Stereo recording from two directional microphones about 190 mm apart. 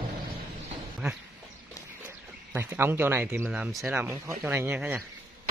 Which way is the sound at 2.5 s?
10° right (ahead or behind).